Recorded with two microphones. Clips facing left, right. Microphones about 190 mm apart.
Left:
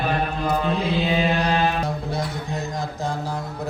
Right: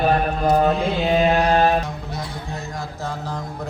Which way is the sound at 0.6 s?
45° right (ahead or behind).